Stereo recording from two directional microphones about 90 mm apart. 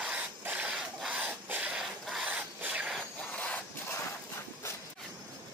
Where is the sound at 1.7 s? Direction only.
5° right (ahead or behind).